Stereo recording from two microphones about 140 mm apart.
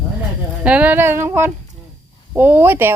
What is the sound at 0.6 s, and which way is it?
Speech, 10° right (ahead or behind).